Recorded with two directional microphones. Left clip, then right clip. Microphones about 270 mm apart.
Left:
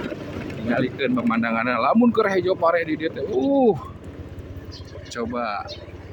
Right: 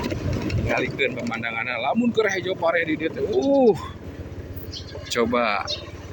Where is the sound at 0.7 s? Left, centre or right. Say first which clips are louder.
Left 1 dB; left.